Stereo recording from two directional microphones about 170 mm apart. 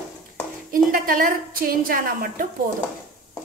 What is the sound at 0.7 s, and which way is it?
A woman's voice, 55° right (ahead or behind).